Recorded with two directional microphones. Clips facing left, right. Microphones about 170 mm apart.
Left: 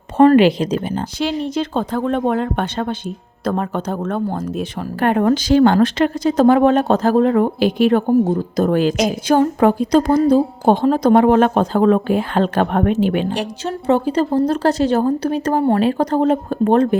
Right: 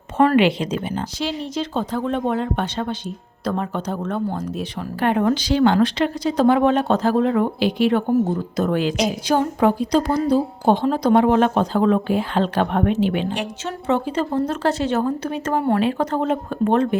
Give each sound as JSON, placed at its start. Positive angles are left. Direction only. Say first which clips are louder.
{"t": 0.2, "sound": "speech", "louder": "left 5 dB", "side_deg": 35}
{"t": 1.2, "sound": "speech", "louder": "left 6 dB", "side_deg": 60}